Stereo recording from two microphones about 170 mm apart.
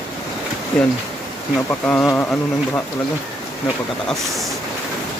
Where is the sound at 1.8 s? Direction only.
5° left (ahead or behind).